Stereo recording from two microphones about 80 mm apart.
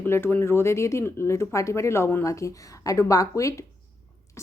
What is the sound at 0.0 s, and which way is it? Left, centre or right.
A woman's voice, left.